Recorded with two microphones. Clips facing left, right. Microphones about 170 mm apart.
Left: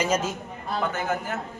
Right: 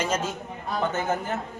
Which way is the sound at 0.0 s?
10° left (ahead or behind).